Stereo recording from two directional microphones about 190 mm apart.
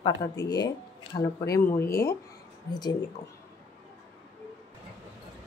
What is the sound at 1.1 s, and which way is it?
Speech, 15° left (ahead or behind).